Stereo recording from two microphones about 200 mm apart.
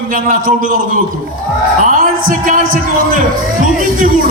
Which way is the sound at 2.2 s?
40° right (ahead or behind).